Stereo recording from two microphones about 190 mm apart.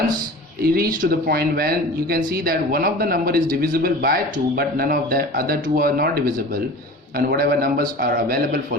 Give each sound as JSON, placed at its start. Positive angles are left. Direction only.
{"t": 0.6, "sound": "speech", "side_deg": -50}